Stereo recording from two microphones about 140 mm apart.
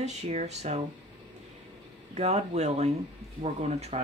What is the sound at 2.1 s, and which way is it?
Speech, 50° right (ahead or behind).